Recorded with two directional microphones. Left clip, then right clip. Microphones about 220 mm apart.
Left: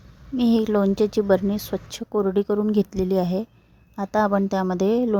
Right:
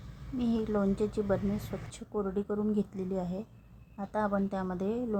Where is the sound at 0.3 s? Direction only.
40° left (ahead or behind).